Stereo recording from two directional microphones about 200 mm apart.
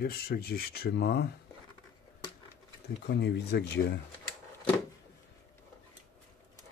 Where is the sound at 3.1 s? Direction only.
55° left (ahead or behind).